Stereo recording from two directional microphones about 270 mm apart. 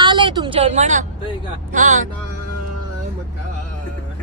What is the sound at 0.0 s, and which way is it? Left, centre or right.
Speech, centre.